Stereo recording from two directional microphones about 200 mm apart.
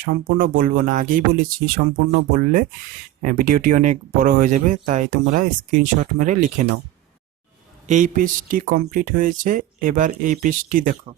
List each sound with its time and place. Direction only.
0.0 s speech: 45° right (ahead or behind)
7.9 s speech: 40° right (ahead or behind)